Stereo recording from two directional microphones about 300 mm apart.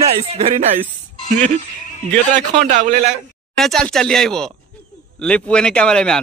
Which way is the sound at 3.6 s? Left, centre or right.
Centre.